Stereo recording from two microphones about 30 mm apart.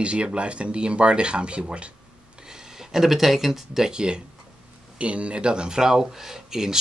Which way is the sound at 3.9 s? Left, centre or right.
Right.